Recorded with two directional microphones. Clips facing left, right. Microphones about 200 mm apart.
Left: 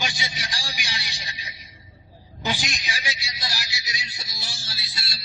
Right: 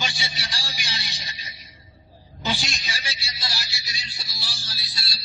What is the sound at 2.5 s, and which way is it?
A man's voice, 15° left (ahead or behind).